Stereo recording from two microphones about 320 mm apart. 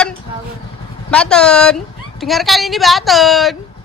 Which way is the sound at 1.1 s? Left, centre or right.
Centre.